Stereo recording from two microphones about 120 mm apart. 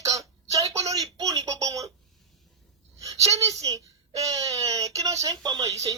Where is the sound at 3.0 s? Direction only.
25° right (ahead or behind).